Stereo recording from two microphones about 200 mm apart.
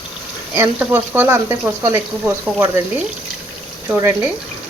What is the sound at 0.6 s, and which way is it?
Speech, 10° right (ahead or behind).